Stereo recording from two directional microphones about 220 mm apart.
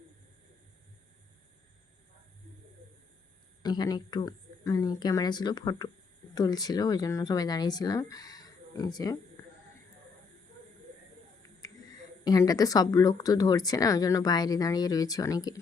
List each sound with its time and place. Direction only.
3.6 s speech: 20° left (ahead or behind)
12.2 s speech: 15° left (ahead or behind)